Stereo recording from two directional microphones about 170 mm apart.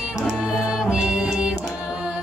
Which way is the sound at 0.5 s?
5° right (ahead or behind).